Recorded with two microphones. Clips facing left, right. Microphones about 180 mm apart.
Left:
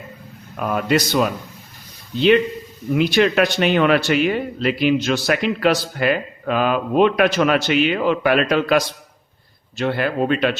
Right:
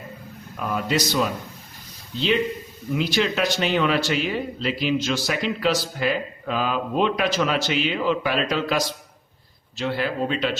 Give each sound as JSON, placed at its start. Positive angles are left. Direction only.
{"t": 0.5, "sound": "speech", "side_deg": 60}